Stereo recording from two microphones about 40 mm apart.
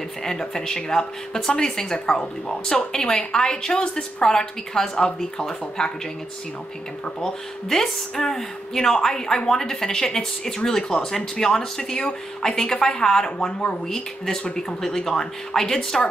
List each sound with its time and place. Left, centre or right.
0.2 s a woman's voice: centre
7.2 s speech: centre